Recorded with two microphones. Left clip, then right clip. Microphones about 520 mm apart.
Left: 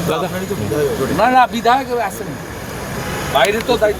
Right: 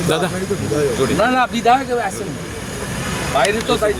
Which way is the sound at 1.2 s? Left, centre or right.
Left.